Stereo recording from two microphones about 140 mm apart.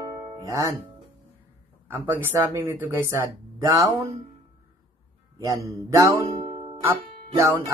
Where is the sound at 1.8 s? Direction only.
15° right (ahead or behind).